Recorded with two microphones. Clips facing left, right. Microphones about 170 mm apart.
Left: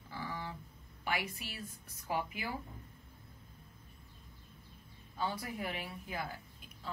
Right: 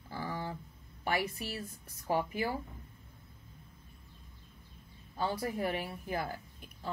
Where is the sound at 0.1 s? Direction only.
40° right (ahead or behind).